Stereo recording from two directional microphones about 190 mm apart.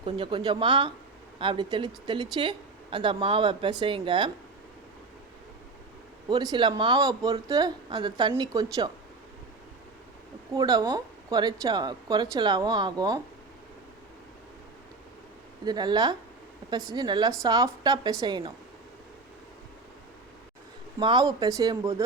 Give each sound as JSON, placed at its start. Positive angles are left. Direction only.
{"t": 0.0, "sound": "speech", "side_deg": -25}
{"t": 6.2, "sound": "speech", "side_deg": -20}
{"t": 10.5, "sound": "speech", "side_deg": -20}
{"t": 15.6, "sound": "speech", "side_deg": -20}
{"t": 21.0, "sound": "speech", "side_deg": -20}